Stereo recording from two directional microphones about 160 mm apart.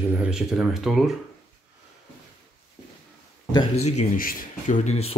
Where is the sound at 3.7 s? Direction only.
45° left (ahead or behind).